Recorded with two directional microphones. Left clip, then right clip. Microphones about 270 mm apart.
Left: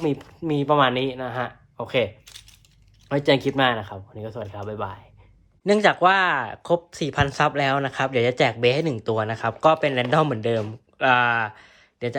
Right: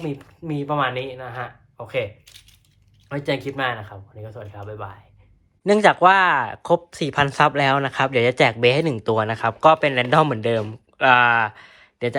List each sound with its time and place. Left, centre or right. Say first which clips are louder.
0.0 s speech: left 5 dB; left
2.3 s speech: left 2 dB; centre
3.1 s speech: left 5 dB; left
5.6 s speech: right 3 dB; centre